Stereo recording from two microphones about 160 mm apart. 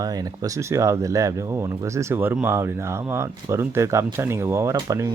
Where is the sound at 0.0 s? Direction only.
25° right (ahead or behind).